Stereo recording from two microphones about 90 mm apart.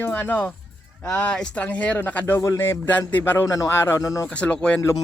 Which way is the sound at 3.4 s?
40° left (ahead or behind).